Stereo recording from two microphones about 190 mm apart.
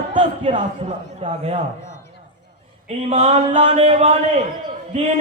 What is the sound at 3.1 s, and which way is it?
A man's voice, 35° right (ahead or behind).